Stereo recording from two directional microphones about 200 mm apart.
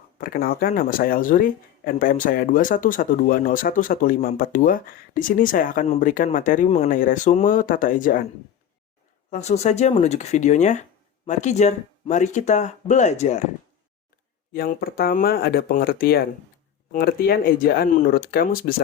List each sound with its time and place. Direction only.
0.2 s speech: 45° left (ahead or behind)
9.3 s speech: 35° left (ahead or behind)
14.5 s speech: 50° left (ahead or behind)